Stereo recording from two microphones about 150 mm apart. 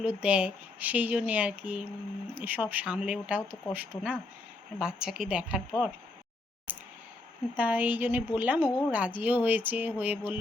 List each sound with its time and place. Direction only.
0.0 s a woman's voice: 10° right (ahead or behind)
6.7 s a sound: 10° right (ahead or behind)
7.5 s a woman's voice: 10° right (ahead or behind)